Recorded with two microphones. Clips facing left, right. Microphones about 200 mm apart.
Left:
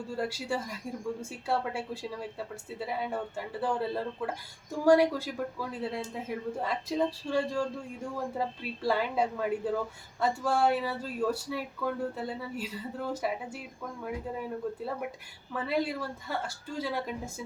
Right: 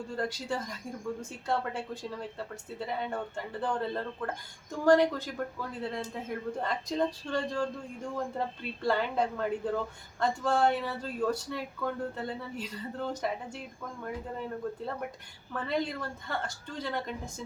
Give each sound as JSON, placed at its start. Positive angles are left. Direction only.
{"t": 0.2, "sound": "speech", "side_deg": 10}
{"t": 14.6, "sound": "speech", "side_deg": 10}